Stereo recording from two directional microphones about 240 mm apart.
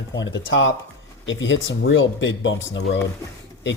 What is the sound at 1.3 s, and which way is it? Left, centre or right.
Speech, left.